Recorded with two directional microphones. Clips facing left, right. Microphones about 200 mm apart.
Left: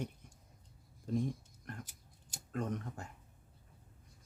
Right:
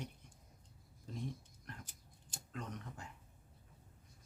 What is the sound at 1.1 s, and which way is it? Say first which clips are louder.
Speech: left 13 dB; 50° left (ahead or behind).